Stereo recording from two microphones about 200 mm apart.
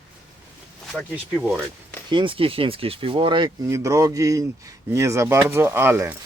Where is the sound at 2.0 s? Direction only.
25° right (ahead or behind).